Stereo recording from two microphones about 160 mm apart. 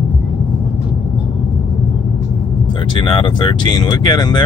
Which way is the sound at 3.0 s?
30° left (ahead or behind).